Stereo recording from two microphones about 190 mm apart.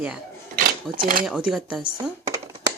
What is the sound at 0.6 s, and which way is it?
Sewing machine, 50° right (ahead or behind).